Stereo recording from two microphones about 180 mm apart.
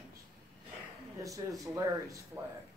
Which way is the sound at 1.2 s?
20° right (ahead or behind).